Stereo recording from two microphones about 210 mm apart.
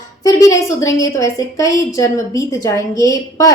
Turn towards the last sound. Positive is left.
turn(degrees=15)  # may be behind; listen again after turning